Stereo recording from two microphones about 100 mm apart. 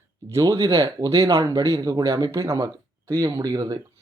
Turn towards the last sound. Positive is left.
turn(degrees=-40)  # may be behind; listen again after turning